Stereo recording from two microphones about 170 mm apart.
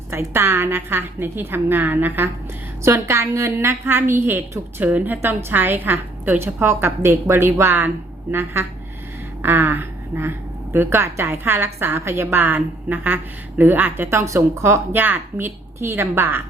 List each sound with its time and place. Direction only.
0.1 s a woman's voice: 15° right (ahead or behind)